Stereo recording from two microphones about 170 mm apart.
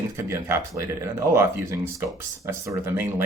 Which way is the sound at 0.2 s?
15° right (ahead or behind).